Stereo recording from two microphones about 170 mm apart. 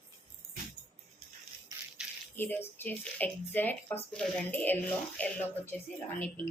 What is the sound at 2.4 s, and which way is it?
Speech, 10° left (ahead or behind).